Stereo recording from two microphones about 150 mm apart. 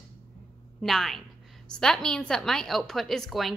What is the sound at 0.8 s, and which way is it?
A woman's voice, centre (ahead or behind).